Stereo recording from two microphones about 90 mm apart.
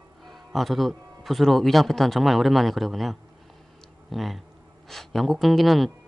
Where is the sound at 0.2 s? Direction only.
Centre (ahead or behind).